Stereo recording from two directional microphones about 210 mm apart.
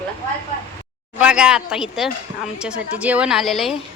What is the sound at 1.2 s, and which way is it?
A woman's voice, 5° right (ahead or behind).